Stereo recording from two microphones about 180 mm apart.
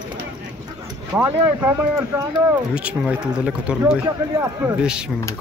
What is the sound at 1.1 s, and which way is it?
Speech, 15° right (ahead or behind).